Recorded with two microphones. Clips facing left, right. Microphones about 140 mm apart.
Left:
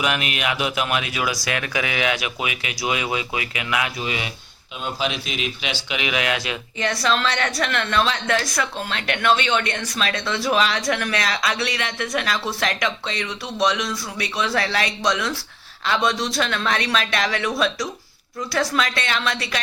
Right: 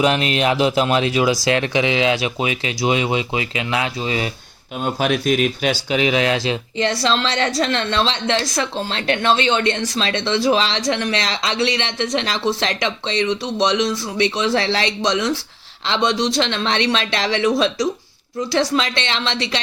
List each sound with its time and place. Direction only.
0.0 s speech: 30° right (ahead or behind)
4.8 s speech: 50° right (ahead or behind)
5.9 s speech: 35° right (ahead or behind)
18.5 s speech: 25° right (ahead or behind)